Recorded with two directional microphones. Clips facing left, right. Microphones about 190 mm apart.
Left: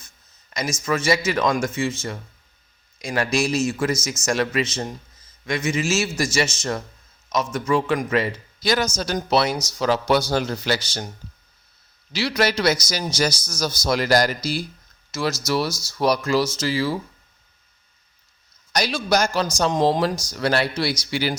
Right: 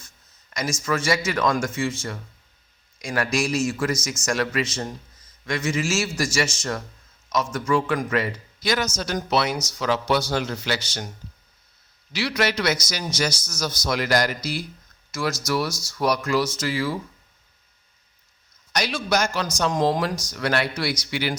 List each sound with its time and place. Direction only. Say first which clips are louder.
0.5 s a man's voice: left 1 dB; 20° left (ahead or behind)
12.1 s speech: left 2 dB; 30° left (ahead or behind)
18.7 s speech: left 2 dB; 35° left (ahead or behind)